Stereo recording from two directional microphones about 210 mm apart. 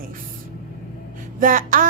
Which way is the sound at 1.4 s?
40° right (ahead or behind).